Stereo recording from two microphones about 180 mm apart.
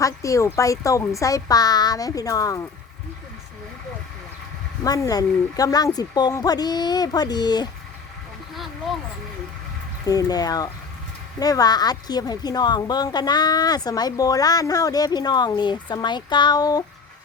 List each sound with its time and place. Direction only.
0.0 s a woman's voice: 15° left (ahead or behind)
4.8 s a woman's voice: 20° left (ahead or behind)
10.1 s a woman's voice: 20° left (ahead or behind)